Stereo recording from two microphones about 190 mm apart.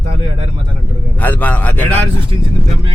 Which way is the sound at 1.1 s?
10° left (ahead or behind).